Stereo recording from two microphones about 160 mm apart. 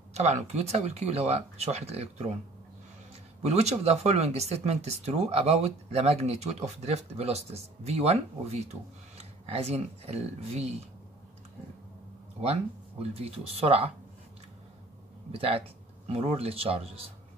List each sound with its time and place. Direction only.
0.1 s speech: 40° right (ahead or behind)
3.4 s speech: 45° right (ahead or behind)
13.0 s speech: 40° right (ahead or behind)
15.3 s speech: 35° right (ahead or behind)